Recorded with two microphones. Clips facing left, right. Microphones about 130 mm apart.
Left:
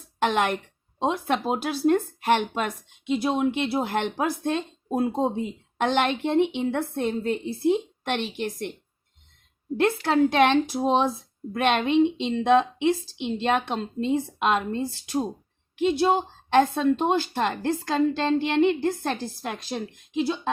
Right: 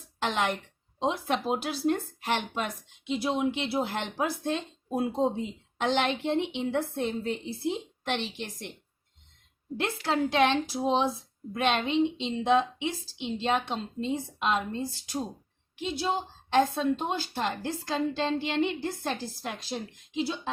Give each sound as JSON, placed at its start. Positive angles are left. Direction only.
{"t": 0.2, "sound": "a woman's voice", "side_deg": 55}
{"t": 9.7, "sound": "a woman's voice", "side_deg": 50}